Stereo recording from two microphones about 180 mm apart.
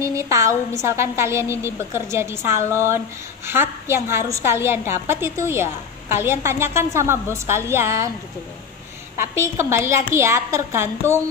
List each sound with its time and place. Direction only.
0.0 s a woman's voice: 15° right (ahead or behind)
9.2 s a woman's voice: 15° right (ahead or behind)